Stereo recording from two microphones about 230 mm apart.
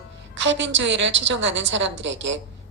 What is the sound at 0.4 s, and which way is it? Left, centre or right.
A woman's voice, right.